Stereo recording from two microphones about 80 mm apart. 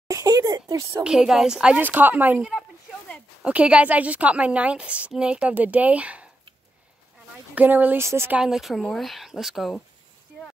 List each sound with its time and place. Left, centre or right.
0.1 s speech: right
1.0 s a woman's voice: centre
1.8 s speech: right
3.4 s a woman's voice: centre
7.5 s speech: right
8.4 s a woman's voice: centre